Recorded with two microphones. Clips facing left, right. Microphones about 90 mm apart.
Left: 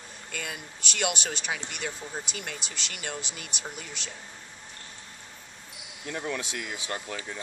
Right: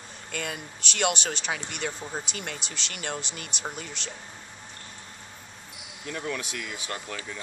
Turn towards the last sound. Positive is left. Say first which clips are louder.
# left 1 dB
turn(degrees=20)  # may be behind; listen again after turning